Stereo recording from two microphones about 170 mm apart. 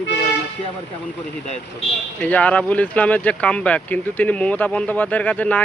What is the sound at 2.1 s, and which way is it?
Speech, 10° left (ahead or behind).